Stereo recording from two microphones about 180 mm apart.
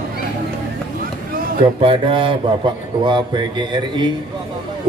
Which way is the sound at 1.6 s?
30° right (ahead or behind).